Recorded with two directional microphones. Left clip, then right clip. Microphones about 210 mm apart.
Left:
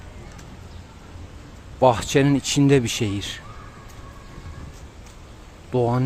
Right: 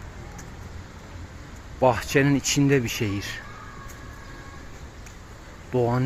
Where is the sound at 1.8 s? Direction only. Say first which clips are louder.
Left 3 dB; 15° left (ahead or behind).